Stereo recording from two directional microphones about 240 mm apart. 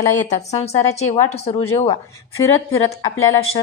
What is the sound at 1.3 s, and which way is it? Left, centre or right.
Speech, left.